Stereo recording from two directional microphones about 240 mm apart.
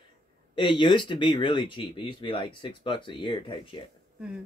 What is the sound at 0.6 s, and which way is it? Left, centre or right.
Speech, centre.